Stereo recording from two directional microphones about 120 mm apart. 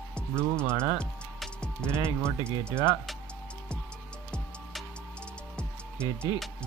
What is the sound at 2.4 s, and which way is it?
Speech, 20° right (ahead or behind).